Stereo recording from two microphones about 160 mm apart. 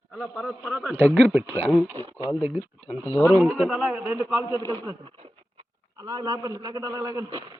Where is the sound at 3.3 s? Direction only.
10° right (ahead or behind).